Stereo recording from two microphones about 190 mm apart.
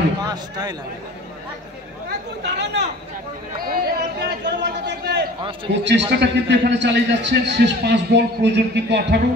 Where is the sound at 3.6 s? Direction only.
50° right (ahead or behind).